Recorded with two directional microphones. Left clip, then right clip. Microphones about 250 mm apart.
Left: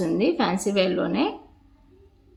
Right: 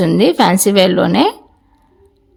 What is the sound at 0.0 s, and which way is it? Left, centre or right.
A woman's voice, right.